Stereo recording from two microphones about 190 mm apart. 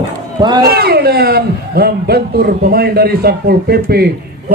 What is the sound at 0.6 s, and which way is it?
A man's voice, 55° right (ahead or behind).